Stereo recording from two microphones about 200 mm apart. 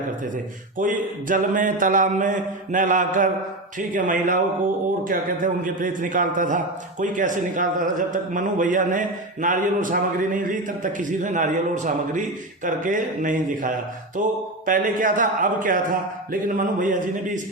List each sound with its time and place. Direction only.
0.8 s a man's voice: 40° right (ahead or behind)